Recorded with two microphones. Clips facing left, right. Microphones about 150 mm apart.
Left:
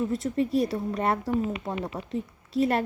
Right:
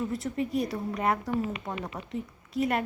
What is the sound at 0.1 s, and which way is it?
A woman's voice, 25° left (ahead or behind).